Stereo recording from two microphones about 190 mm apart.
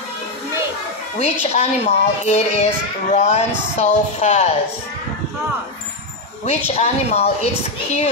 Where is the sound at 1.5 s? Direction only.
35° left (ahead or behind).